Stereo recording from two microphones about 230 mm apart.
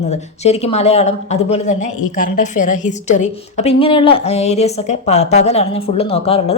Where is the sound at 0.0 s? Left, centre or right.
Left.